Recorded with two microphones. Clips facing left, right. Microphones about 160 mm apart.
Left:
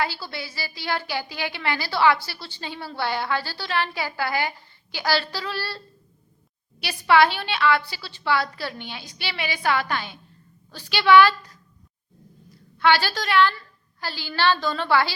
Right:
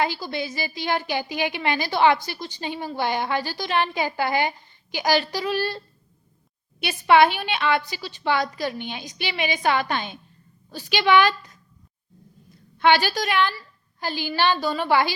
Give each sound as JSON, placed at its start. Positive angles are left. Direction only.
{"t": 0.0, "sound": "a woman's voice", "side_deg": -20}
{"t": 12.8, "sound": "a woman's voice", "side_deg": -15}